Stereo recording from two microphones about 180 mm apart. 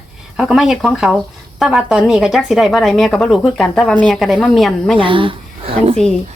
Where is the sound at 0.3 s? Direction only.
Centre (ahead or behind).